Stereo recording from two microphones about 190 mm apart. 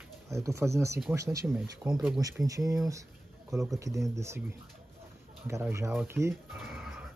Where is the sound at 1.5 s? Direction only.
5° right (ahead or behind).